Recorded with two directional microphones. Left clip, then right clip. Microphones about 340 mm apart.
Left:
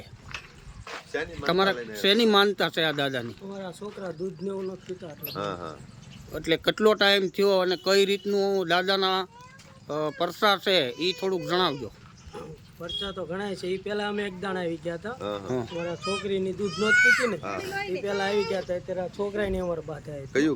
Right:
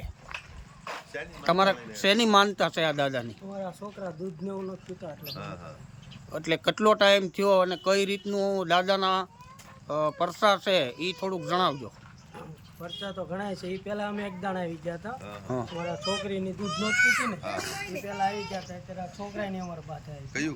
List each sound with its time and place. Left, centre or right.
1.1 s speech: centre
1.5 s speech: centre
6.3 s speech: centre
18.0 s speech: centre